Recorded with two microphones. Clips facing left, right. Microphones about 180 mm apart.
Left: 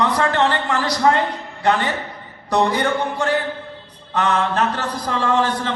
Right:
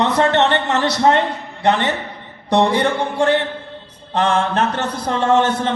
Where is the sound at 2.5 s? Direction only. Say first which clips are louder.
Right 3 dB; 25° right (ahead or behind).